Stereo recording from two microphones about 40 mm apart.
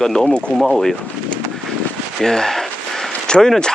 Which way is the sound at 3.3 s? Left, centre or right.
Left.